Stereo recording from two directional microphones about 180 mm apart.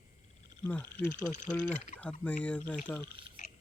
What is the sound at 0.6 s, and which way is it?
Speech, 10° left (ahead or behind).